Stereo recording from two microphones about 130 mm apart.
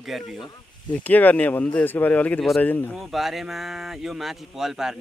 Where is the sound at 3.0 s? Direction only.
Centre (ahead or behind).